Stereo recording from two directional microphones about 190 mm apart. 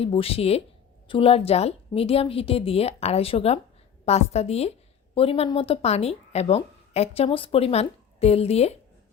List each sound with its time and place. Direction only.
0.0 s speech: 30° left (ahead or behind)